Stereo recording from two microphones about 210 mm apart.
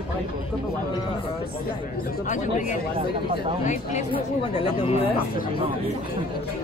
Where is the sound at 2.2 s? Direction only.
35° left (ahead or behind).